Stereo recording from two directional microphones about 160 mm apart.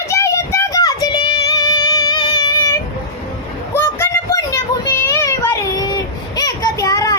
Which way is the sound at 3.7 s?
15° left (ahead or behind).